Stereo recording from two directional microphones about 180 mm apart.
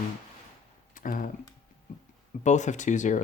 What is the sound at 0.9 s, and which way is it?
Speech, 50° left (ahead or behind).